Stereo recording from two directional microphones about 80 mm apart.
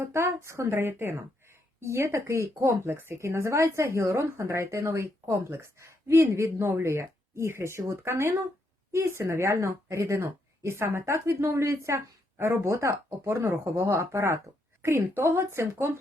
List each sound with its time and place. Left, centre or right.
0.0 s speech: right